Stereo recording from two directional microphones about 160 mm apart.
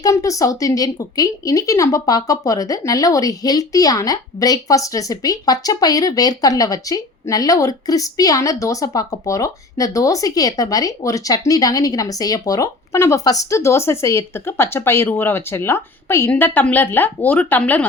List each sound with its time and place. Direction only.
0.0 s speech: 20° left (ahead or behind)